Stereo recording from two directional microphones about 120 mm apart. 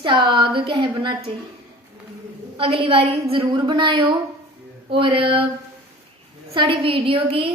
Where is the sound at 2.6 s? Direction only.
50° right (ahead or behind).